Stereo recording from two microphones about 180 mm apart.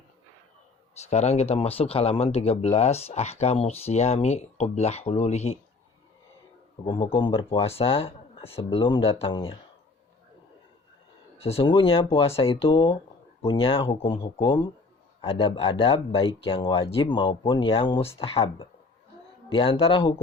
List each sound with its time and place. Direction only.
0.9 s speech: 40° left (ahead or behind)
6.8 s speech: 25° left (ahead or behind)
11.3 s speech: 35° left (ahead or behind)